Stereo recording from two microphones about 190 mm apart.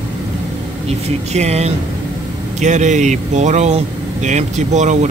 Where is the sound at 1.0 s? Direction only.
35° right (ahead or behind).